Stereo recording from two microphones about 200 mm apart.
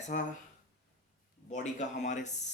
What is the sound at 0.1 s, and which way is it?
Speech, 40° left (ahead or behind).